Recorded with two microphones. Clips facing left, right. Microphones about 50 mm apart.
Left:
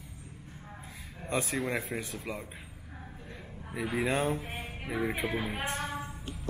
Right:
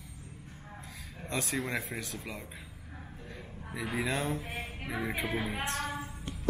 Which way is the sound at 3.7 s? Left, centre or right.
Centre.